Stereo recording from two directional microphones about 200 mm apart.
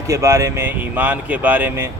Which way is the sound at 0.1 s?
15° right (ahead or behind).